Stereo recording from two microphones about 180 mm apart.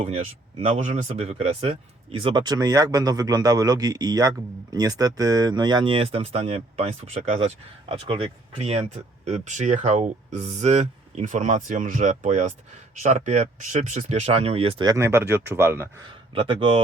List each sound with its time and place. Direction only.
0.6 s speech: 35° right (ahead or behind); by 15.9 s 15° right (ahead or behind)
16.3 s speech: 30° right (ahead or behind)